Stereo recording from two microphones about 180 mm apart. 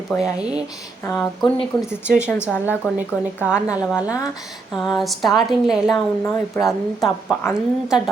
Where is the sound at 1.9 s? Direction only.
5° right (ahead or behind).